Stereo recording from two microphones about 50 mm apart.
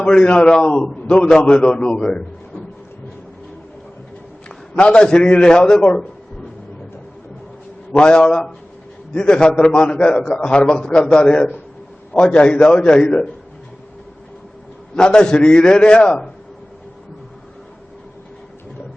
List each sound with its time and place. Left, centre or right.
0.0 s a man's voice: centre
4.8 s a man's voice: centre
7.9 s a man's voice: centre
14.9 s a man's voice: centre